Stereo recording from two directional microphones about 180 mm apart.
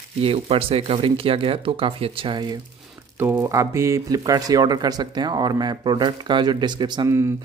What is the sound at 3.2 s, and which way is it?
Speech, 15° right (ahead or behind).